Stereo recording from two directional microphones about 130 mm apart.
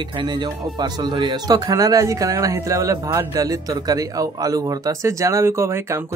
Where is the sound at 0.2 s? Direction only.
35° right (ahead or behind).